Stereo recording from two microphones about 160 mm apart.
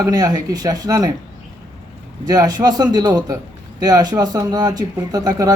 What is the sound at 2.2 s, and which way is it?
Speech, 25° right (ahead or behind).